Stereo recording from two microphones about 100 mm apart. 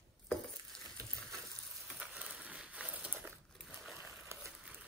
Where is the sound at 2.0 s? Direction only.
15° right (ahead or behind).